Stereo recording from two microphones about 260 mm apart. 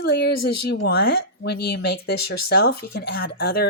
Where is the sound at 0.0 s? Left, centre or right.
Left.